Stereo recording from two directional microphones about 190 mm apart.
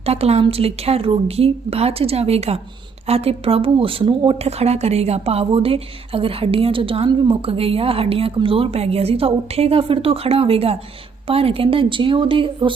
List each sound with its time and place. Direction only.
0.0 s a woman's voice: 35° right (ahead or behind)